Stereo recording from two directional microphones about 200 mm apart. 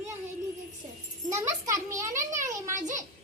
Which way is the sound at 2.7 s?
35° right (ahead or behind).